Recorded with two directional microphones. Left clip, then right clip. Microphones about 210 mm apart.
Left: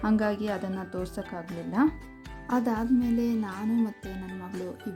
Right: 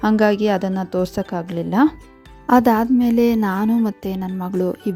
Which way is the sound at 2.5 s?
45° right (ahead or behind).